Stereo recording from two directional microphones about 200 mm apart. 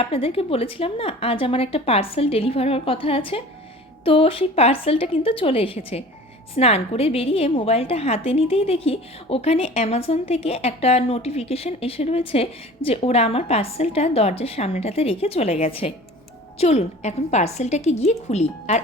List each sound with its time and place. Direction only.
0.0 s a woman's voice: 30° left (ahead or behind)